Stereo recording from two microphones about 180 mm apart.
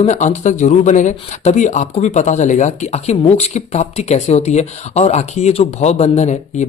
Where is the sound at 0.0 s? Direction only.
40° left (ahead or behind).